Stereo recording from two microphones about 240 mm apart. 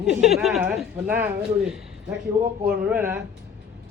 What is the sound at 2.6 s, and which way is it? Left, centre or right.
Speech, centre.